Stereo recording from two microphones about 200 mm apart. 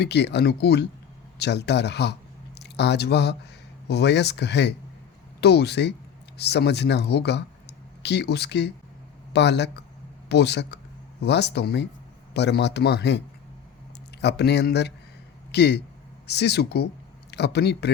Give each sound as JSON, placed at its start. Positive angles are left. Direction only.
{"t": 0.0, "sound": "a man's voice", "side_deg": 60}